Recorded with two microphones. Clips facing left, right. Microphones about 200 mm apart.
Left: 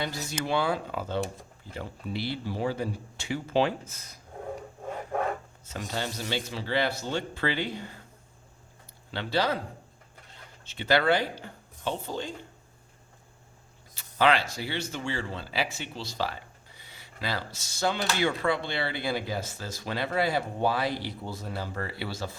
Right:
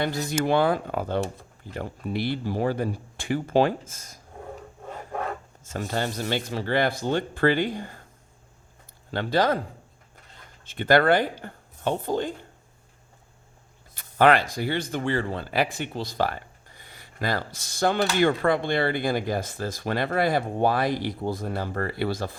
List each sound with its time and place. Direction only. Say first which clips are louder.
0.0 s speech: right 7 dB; 55° right (ahead or behind)
5.6 s speech: right 5 dB; 50° right (ahead or behind)
9.1 s speech: right 5 dB; 50° right (ahead or behind)
10.7 s speech: right 5 dB; 50° right (ahead or behind)
13.9 s a sound: right 5 dB; 55° right (ahead or behind)
14.5 s speech: right 6 dB; 50° right (ahead or behind)